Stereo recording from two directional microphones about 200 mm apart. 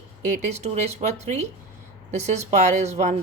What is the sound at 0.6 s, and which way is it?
Speech, 35° right (ahead or behind).